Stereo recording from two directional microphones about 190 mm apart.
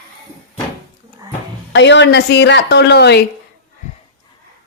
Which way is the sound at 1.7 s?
70° left (ahead or behind).